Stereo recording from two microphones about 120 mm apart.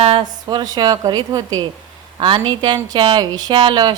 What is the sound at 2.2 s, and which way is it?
A woman's voice, 45° right (ahead or behind).